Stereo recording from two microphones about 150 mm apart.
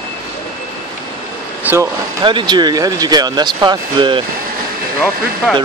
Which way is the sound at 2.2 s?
30° right (ahead or behind).